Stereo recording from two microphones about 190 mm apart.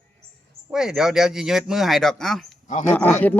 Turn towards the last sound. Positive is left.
turn(degrees=10)  # may be behind; listen again after turning